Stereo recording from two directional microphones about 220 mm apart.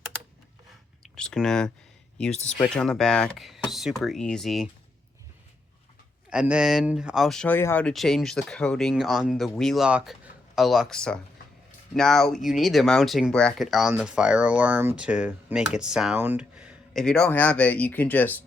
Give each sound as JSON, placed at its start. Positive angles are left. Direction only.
{"t": 1.1, "sound": "speech", "side_deg": 5}
{"t": 6.3, "sound": "speech", "side_deg": -5}